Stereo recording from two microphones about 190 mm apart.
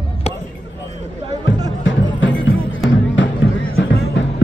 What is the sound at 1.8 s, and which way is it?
Music, 75° left (ahead or behind).